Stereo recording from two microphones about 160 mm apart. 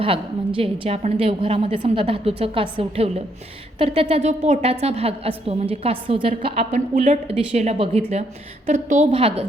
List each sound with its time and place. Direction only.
0.0 s a woman's voice: 35° right (ahead or behind)
6.9 s speech: 55° right (ahead or behind)
7.3 s speech: 45° right (ahead or behind)